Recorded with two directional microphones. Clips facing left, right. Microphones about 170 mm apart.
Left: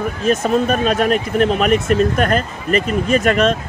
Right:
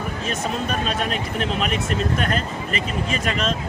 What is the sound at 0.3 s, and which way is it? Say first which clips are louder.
Speech: left 11 dB; 50° left (ahead or behind).